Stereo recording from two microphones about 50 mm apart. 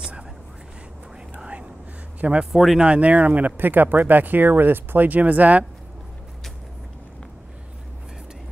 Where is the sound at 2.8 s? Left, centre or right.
Right.